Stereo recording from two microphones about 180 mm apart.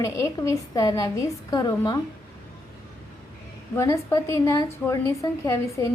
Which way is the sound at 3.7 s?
15° left (ahead or behind).